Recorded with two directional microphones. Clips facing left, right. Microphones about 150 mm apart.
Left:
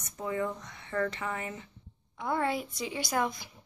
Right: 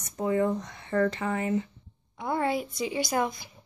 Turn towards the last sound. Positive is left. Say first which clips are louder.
# right 5 dB
turn(degrees=-5)  # may be behind; listen again after turning